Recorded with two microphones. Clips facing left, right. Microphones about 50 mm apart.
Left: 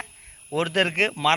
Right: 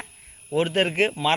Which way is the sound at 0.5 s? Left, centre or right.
Left.